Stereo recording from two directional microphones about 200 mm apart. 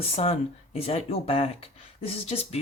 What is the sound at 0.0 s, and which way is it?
Speech, 30° left (ahead or behind).